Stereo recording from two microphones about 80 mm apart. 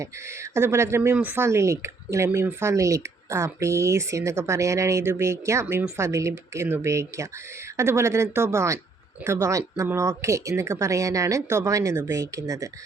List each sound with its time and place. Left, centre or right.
0.0 s speech: right